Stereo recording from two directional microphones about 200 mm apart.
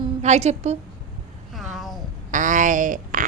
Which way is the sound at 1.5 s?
Centre (ahead or behind).